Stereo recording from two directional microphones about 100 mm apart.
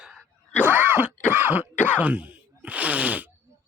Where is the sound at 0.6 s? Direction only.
20° right (ahead or behind).